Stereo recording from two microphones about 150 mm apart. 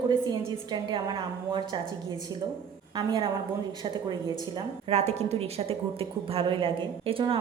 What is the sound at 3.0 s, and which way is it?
Speech, 30° right (ahead or behind).